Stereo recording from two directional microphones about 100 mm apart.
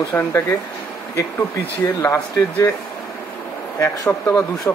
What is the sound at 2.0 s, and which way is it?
Speech, 15° left (ahead or behind).